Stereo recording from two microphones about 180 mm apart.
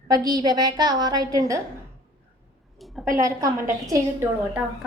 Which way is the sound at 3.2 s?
20° right (ahead or behind).